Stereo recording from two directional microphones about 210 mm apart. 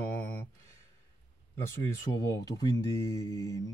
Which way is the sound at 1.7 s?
10° left (ahead or behind).